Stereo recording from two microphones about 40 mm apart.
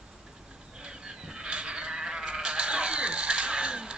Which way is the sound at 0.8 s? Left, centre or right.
Right.